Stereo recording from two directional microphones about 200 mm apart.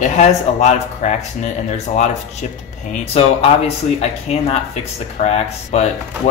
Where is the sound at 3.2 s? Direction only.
30° left (ahead or behind).